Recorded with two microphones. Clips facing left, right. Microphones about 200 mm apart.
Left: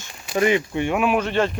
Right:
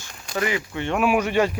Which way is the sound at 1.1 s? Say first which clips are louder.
Even; 10° right (ahead or behind).